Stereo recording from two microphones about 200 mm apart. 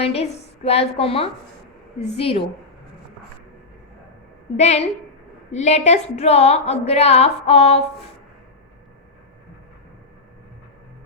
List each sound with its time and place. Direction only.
0.0 s a woman's voice: 30° left (ahead or behind)
4.5 s speech: 35° left (ahead or behind)